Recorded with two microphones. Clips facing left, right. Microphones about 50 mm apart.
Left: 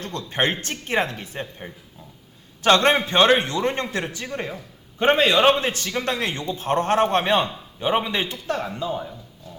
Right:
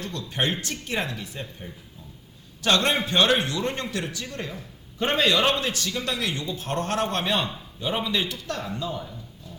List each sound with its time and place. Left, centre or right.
0.0 s a man's voice: left